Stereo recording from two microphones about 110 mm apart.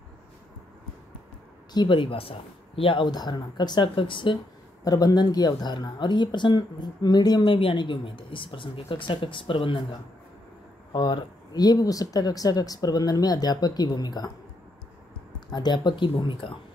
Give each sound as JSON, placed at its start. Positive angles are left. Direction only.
{"t": 1.7, "sound": "speech", "side_deg": 45}
{"t": 3.1, "sound": "speech", "side_deg": 40}
{"t": 4.8, "sound": "speech", "side_deg": 35}
{"t": 7.4, "sound": "speech", "side_deg": 55}
{"t": 10.9, "sound": "speech", "side_deg": 40}
{"t": 15.5, "sound": "speech", "side_deg": 40}